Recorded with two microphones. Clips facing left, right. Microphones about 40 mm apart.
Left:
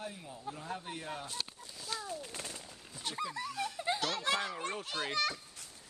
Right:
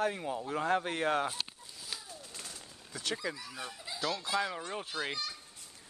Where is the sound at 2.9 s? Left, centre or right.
Right.